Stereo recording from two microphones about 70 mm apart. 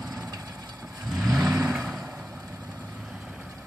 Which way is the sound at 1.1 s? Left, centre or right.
Centre.